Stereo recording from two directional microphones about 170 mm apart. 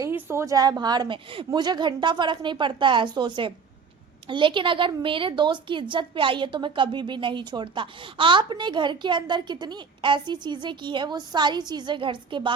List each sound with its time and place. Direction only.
0.0 s a woman's voice: 15° right (ahead or behind)